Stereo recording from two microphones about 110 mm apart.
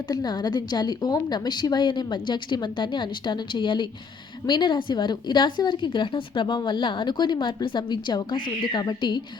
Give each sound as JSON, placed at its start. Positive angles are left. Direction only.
{"t": 0.1, "sound": "a woman's voice", "side_deg": 40}